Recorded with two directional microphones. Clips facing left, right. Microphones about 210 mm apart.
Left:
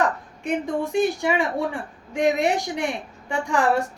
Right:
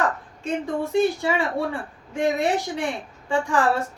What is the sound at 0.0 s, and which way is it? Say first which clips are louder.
A woman's voice: left 2 dB; 15° left (ahead or behind).